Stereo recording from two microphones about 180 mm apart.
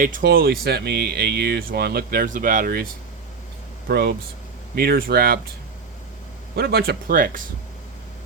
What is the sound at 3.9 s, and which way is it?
Speech, 65° right (ahead or behind).